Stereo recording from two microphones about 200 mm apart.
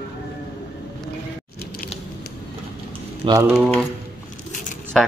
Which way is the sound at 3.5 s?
Centre (ahead or behind).